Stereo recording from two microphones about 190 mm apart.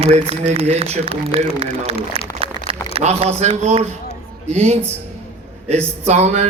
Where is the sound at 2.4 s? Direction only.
30° right (ahead or behind).